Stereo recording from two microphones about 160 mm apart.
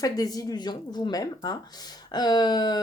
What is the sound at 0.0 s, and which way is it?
A woman's voice, 25° left (ahead or behind).